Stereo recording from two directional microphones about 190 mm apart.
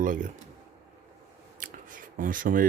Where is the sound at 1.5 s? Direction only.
45° right (ahead or behind).